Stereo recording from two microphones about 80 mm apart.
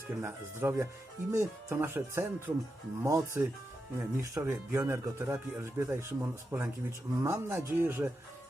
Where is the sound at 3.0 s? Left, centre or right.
Right.